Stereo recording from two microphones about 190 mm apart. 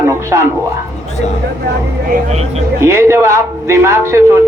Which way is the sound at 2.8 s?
15° right (ahead or behind).